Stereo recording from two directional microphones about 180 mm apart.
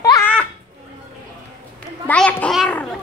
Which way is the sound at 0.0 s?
20° left (ahead or behind).